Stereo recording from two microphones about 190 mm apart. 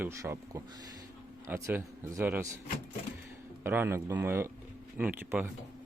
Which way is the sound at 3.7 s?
10° right (ahead or behind).